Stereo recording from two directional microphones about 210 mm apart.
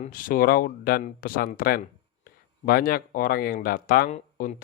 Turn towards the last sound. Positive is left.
turn(degrees=35)  # may be behind; listen again after turning